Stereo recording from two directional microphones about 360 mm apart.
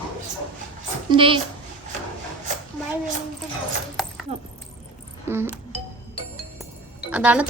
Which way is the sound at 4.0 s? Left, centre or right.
Centre.